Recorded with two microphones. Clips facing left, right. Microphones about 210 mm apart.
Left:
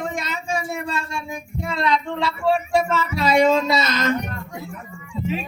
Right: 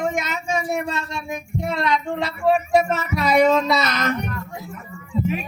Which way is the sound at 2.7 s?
30° left (ahead or behind).